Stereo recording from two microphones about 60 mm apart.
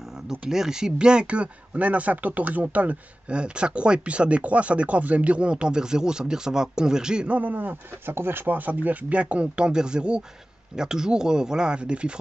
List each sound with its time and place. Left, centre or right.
0.3 s speech: centre
7.3 s speech: right